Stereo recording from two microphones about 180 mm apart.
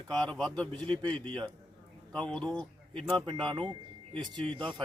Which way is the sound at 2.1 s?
5° left (ahead or behind).